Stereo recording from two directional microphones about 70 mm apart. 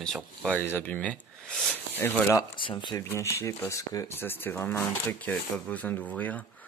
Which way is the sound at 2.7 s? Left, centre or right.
Left.